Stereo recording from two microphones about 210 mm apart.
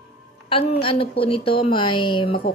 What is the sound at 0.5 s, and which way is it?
A woman's voice, 25° left (ahead or behind).